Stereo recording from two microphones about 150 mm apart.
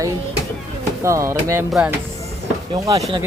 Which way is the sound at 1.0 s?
20° right (ahead or behind).